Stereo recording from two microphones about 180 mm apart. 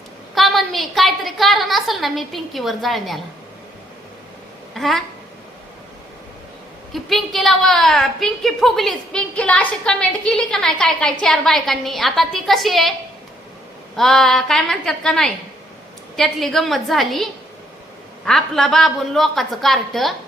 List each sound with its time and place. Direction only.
0.3 s a sound: centre (ahead or behind)
4.7 s speech: centre (ahead or behind)
6.9 s a woman's voice: centre (ahead or behind)
13.9 s a woman's voice: centre (ahead or behind)
18.3 s a woman's voice: centre (ahead or behind)